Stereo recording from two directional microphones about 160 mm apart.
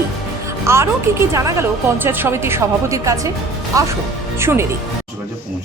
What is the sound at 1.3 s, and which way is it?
Speech, 20° right (ahead or behind).